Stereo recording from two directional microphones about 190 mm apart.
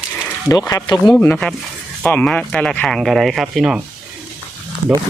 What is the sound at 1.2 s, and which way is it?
Speech, 10° left (ahead or behind).